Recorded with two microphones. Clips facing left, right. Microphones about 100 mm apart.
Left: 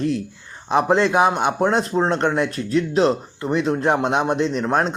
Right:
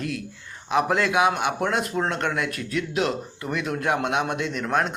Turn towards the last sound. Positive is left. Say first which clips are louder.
# left 5 dB
turn(degrees=30)  # may be behind; listen again after turning